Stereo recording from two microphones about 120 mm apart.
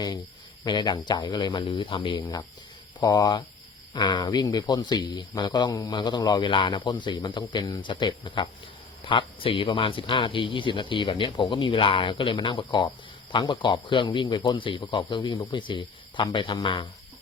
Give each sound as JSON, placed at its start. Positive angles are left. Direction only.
{"t": 0.6, "sound": "speech", "side_deg": 40}
{"t": 3.0, "sound": "speech", "side_deg": 35}